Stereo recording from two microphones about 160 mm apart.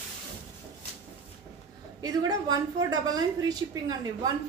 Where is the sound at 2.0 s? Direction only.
25° right (ahead or behind).